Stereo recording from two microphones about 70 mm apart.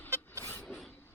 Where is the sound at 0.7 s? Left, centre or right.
Centre.